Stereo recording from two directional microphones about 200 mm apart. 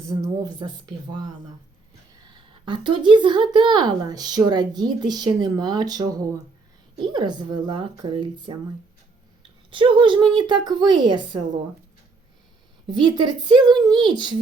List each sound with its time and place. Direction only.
0.0 s speech: 15° right (ahead or behind)
2.3 s speech: 25° right (ahead or behind)
12.9 s speech: 20° right (ahead or behind)